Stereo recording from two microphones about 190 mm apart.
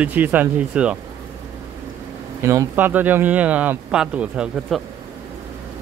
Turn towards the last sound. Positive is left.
turn(degrees=-5)  # may be behind; listen again after turning